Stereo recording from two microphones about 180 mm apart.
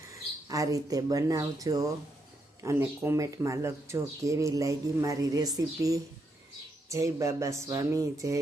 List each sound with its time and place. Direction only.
0.1 s speech: 20° right (ahead or behind)